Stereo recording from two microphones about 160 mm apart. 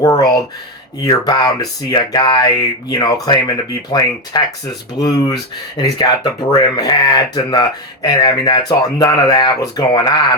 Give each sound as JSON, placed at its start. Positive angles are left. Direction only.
{"t": 0.0, "sound": "speech", "side_deg": 25}